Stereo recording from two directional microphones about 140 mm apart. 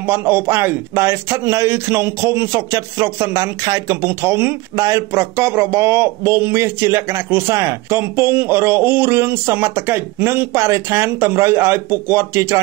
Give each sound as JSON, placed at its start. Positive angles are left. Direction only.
{"t": 0.0, "sound": "speech", "side_deg": -15}